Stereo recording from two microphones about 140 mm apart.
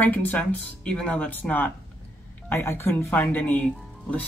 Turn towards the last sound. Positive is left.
turn(degrees=10)  # may be behind; listen again after turning